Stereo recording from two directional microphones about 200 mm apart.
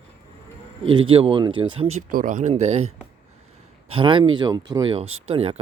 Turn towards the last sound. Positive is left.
turn(degrees=-30)  # may be behind; listen again after turning